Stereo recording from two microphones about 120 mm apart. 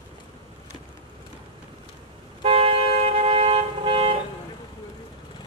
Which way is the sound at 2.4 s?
50° right (ahead or behind).